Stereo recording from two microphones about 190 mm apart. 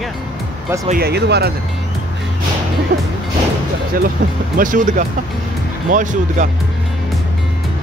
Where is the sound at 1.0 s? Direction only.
60° right (ahead or behind).